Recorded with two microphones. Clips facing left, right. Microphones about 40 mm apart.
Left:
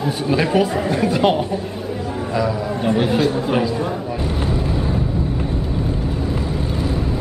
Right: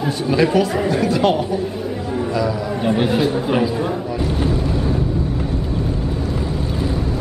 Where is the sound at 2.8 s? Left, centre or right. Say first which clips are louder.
Even; centre.